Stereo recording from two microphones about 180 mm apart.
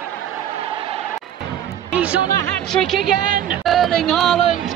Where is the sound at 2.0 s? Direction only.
5° right (ahead or behind).